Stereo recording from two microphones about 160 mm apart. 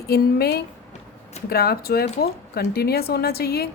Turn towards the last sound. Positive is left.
turn(degrees=75)  # may be behind; listen again after turning